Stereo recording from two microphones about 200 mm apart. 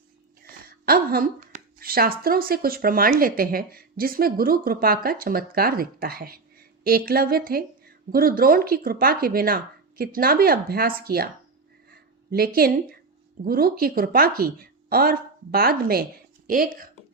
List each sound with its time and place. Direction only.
0.4 s a woman's voice: 50° right (ahead or behind)
11.9 s a sound: 50° right (ahead or behind)
12.5 s a woman's voice: 50° right (ahead or behind)